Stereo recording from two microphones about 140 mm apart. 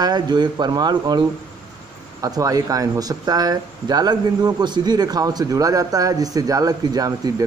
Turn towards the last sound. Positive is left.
turn(degrees=-25)  # may be behind; listen again after turning